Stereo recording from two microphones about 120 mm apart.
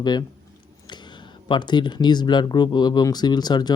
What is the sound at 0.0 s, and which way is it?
Speech, 35° left (ahead or behind).